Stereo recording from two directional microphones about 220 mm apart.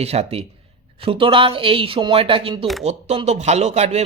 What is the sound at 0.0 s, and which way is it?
A man's voice, 30° right (ahead or behind).